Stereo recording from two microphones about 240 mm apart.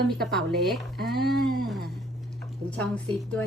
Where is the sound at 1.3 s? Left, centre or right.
Right.